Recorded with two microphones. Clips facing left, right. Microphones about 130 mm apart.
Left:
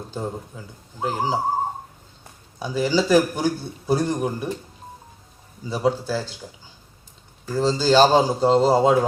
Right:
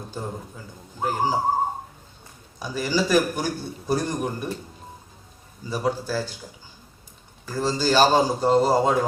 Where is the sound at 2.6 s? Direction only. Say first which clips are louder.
Left 3 dB; 15° left (ahead or behind).